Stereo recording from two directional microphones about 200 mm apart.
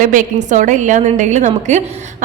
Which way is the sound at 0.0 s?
40° right (ahead or behind).